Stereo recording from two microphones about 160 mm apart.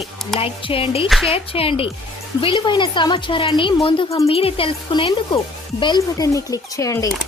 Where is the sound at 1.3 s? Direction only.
35° left (ahead or behind); by 7.1 s 20° left (ahead or behind).